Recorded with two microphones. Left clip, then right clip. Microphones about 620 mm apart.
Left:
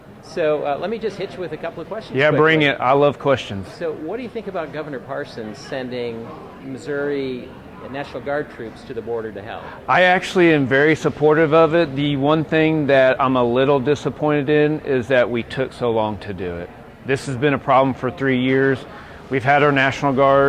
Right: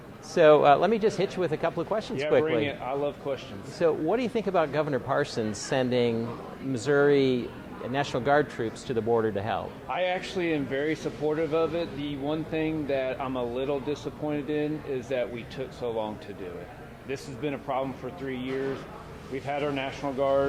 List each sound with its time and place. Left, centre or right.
0.3 s speech: right
2.4 s a man's voice: left
3.8 s speech: right
9.8 s a man's voice: left